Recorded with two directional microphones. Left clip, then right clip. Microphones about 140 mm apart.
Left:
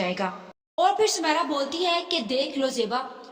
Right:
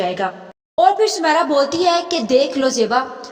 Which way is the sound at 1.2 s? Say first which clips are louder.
Right 10 dB; 50° right (ahead or behind).